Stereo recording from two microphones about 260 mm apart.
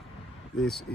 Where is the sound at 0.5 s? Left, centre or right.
Centre.